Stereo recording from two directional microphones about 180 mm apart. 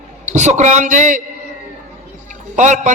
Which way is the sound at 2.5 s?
40° right (ahead or behind).